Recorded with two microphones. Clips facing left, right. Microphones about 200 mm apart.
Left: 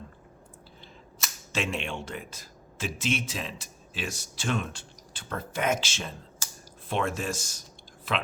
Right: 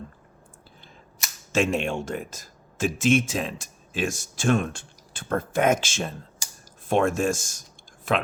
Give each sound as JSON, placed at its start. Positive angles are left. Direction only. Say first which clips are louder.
{"t": 1.5, "sound": "speech", "louder": "right 8 dB", "side_deg": -45}